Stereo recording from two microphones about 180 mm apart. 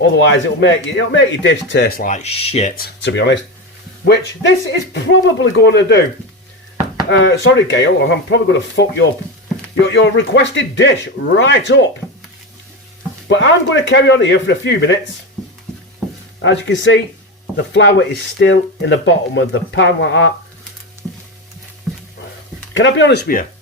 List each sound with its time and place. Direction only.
0.3 s speech: 90° left
2.0 s speech: 45° left (ahead or behind)
2.7 s speech: 70° left (ahead or behind)
7.1 s speech: 90° left
13.2 s speech: 85° left
16.4 s speech: 90° left
22.7 s speech: 90° left; by 23.5 s 55° left (ahead or behind)